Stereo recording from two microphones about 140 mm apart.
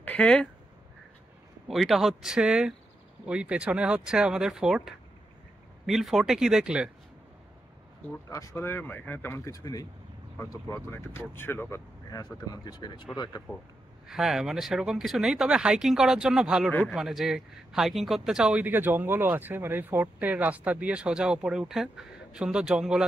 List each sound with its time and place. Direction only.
0.0 s a sound: 10° left (ahead or behind)
1.7 s speech: centre (ahead or behind)
8.3 s speech: 25° left (ahead or behind)
12.1 s speech: 30° left (ahead or behind)
14.0 s speech: 5° right (ahead or behind)